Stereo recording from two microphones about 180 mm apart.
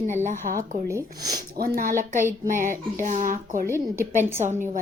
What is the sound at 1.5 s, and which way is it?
Speech, 55° right (ahead or behind).